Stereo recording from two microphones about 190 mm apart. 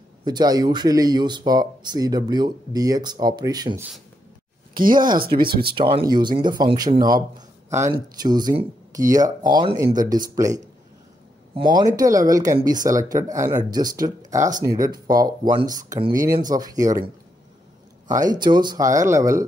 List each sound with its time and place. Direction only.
0.2 s speech: 20° right (ahead or behind)
5.1 s speech: 50° right (ahead or behind)
5.8 s speech: 25° right (ahead or behind)
18.0 s speech: 20° right (ahead or behind)